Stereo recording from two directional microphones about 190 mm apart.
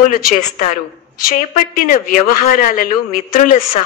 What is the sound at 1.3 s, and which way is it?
A woman's voice, 50° left (ahead or behind).